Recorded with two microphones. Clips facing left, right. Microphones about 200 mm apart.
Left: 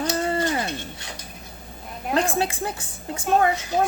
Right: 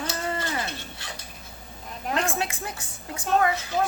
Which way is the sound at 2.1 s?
35° left (ahead or behind).